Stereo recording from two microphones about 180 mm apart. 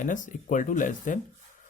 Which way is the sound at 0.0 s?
45° left (ahead or behind).